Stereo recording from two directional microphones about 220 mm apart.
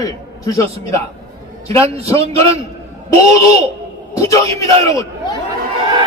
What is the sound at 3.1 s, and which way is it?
A man's voice, 15° left (ahead or behind).